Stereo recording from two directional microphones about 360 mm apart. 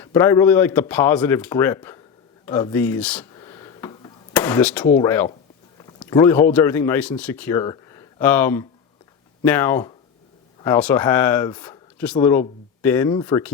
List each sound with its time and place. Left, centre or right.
0.0 s speech: centre
2.5 s a sound: centre
4.9 s speech: centre